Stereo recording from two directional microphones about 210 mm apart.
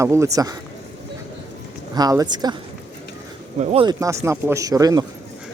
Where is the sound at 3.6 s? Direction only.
30° right (ahead or behind).